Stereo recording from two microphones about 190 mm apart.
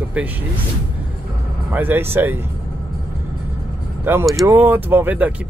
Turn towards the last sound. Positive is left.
turn(degrees=-10)  # may be behind; listen again after turning